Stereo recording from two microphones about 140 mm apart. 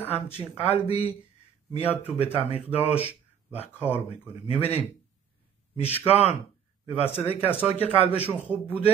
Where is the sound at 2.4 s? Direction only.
45° left (ahead or behind).